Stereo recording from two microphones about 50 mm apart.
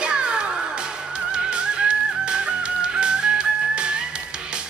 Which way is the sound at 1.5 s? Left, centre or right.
Centre.